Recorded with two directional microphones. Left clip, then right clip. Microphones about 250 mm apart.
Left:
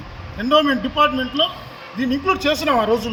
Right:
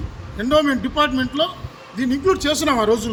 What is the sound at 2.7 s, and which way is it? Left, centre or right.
Speech, right.